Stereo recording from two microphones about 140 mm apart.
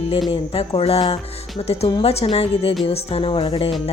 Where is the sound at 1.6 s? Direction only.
50° left (ahead or behind).